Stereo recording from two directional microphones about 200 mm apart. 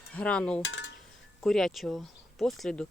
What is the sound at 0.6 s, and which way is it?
Speech, 65° left (ahead or behind).